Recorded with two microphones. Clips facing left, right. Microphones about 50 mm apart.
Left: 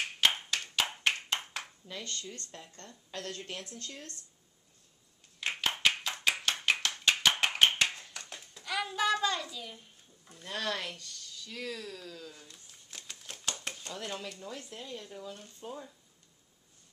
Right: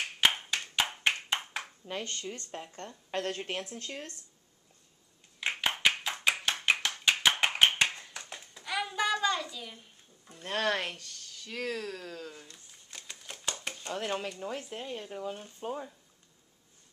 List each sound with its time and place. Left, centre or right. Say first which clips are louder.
0.0 s clapping: right 1 dB; centre
1.9 s speech: right 4 dB; right
5.4 s clapping: right 1 dB; centre
10.4 s speech: right 5 dB; right
12.4 s a sound: right 1 dB; centre
13.8 s speech: right 8 dB; right